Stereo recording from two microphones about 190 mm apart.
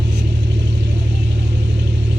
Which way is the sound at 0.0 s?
70° right (ahead or behind).